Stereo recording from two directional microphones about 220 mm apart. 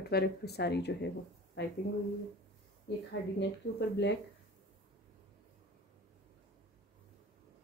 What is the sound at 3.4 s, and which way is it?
Speech, 50° left (ahead or behind).